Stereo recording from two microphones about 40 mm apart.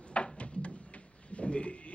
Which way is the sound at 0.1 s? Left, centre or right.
Left.